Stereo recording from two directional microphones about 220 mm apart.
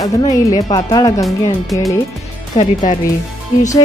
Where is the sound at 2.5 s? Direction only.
35° left (ahead or behind).